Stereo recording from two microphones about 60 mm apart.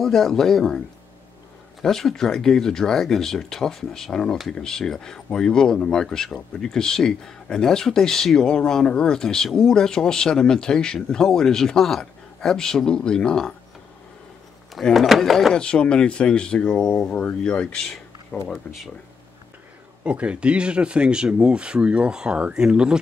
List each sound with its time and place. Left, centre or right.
0.0 s speech: centre
14.7 s speech: centre
15.5 s speech: centre
20.0 s speech: right